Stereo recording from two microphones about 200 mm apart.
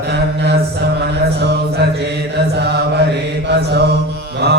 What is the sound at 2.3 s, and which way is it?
Mantra, 55° right (ahead or behind).